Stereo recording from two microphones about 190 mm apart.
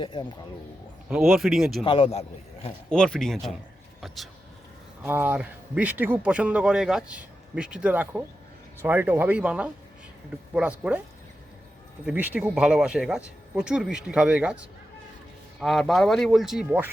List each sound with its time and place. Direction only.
0.0 s a man's voice: 25° left (ahead or behind)
1.3 s speech: centre (ahead or behind)
1.8 s a man's voice: 30° left (ahead or behind)
2.9 s speech: 5° left (ahead or behind)
5.0 s speech: 10° right (ahead or behind)
12.0 s speech: 10° right (ahead or behind)